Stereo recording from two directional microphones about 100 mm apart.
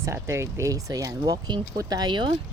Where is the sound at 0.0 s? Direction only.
25° right (ahead or behind).